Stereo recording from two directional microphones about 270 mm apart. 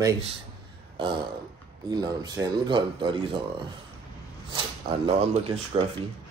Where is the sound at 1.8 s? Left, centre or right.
Centre.